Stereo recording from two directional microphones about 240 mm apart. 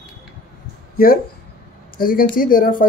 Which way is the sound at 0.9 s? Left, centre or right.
Left.